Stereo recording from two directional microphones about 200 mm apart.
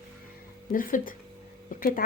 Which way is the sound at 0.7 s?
45° left (ahead or behind).